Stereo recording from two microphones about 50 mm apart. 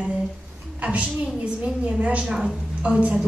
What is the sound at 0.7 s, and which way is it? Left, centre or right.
A woman's voice, right.